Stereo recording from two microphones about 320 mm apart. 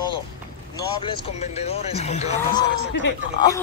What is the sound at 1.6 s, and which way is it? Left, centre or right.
Speech, centre.